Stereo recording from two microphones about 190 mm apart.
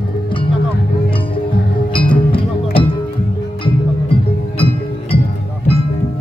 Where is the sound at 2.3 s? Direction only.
25° left (ahead or behind).